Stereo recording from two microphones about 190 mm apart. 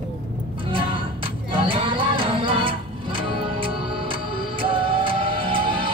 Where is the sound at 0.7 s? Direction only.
25° right (ahead or behind).